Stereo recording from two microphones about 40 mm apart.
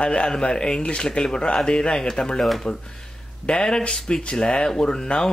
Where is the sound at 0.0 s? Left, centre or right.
Left.